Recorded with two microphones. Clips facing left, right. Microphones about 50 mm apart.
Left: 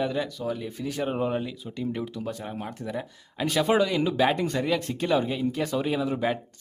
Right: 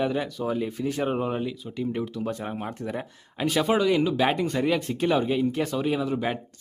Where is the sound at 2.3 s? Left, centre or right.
Right.